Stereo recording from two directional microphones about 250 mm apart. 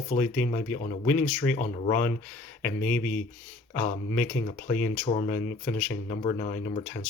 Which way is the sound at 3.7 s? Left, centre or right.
Left.